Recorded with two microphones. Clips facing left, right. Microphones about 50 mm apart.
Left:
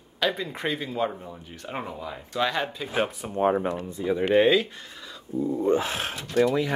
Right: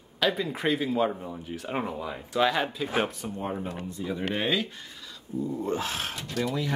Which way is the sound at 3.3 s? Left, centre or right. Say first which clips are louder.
Left 12 dB; left.